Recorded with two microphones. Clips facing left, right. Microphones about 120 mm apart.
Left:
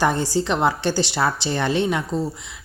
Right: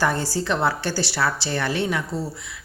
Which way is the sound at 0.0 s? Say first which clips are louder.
Left 3 dB; 20° left (ahead or behind).